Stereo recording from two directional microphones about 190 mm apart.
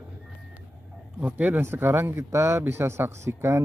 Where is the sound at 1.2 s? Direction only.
10° right (ahead or behind).